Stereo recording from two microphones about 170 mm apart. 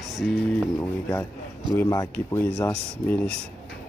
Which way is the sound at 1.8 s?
15° left (ahead or behind).